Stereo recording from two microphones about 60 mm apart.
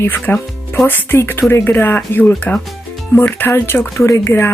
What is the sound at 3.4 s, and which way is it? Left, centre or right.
Speech, left.